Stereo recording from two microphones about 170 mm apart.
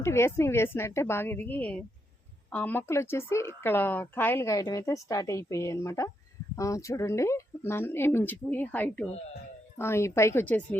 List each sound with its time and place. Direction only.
0.0 s speech: 15° left (ahead or behind)